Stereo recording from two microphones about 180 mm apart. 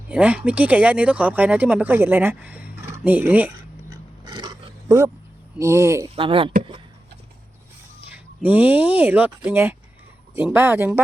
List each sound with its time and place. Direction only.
0.1 s speech: 5° right (ahead or behind)
3.9 s dog: 25° right (ahead or behind)
5.5 s speech: 15° right (ahead or behind)
6.1 s speech: 30° right (ahead or behind)
8.0 s speech: 10° right (ahead or behind)